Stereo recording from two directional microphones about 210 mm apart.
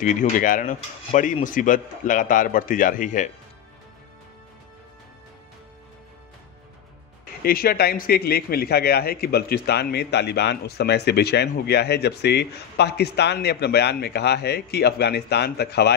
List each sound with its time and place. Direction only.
0.0 s speech: 40° left (ahead or behind)
7.4 s a man's voice: 45° left (ahead or behind)